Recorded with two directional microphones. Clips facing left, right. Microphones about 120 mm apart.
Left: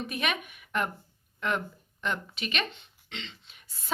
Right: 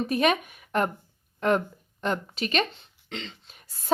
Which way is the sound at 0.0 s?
40° right (ahead or behind).